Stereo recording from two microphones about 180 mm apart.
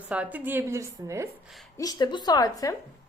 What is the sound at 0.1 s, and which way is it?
A woman's voice, 5° right (ahead or behind).